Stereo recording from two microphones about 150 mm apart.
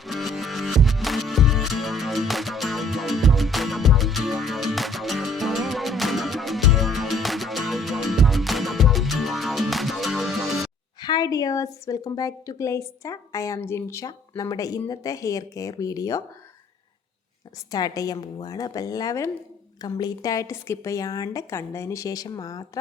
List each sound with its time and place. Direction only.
0.0 s music: centre (ahead or behind)
11.0 s a woman's voice: 25° left (ahead or behind)
17.7 s a woman's voice: 25° left (ahead or behind)